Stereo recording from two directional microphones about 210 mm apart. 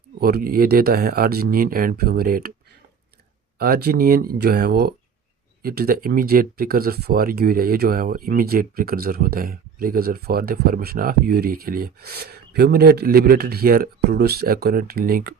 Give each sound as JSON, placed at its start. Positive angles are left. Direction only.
{"t": 0.2, "sound": "speech", "side_deg": -45}
{"t": 3.6, "sound": "speech", "side_deg": -45}